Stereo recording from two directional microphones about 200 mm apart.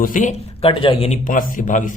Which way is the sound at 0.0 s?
40° left (ahead or behind).